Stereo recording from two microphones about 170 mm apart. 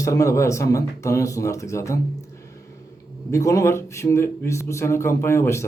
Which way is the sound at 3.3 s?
20° left (ahead or behind).